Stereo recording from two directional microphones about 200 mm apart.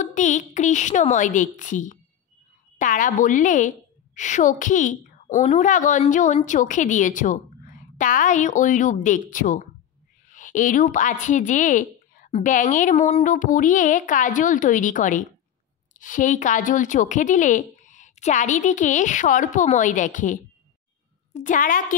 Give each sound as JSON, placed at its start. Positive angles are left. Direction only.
{"t": 0.0, "sound": "a woman's voice", "side_deg": 40}